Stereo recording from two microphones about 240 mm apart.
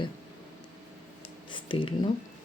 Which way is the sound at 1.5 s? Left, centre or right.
Left.